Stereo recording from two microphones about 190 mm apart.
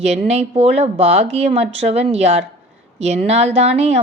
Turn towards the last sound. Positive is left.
turn(degrees=-35)  # may be behind; listen again after turning